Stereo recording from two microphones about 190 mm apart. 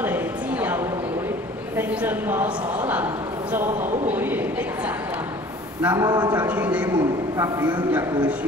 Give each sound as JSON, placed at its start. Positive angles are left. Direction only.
{"t": 0.0, "sound": "a sound", "side_deg": -10}
{"t": 1.8, "sound": "a man's voice", "side_deg": -10}
{"t": 4.1, "sound": "a man's voice", "side_deg": -10}
{"t": 5.8, "sound": "a man's voice", "side_deg": -5}
{"t": 6.0, "sound": "a man's voice", "side_deg": -20}
{"t": 6.3, "sound": "a man's voice", "side_deg": -10}